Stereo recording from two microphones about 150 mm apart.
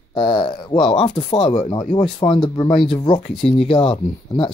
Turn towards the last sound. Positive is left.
turn(degrees=35)  # may be behind; listen again after turning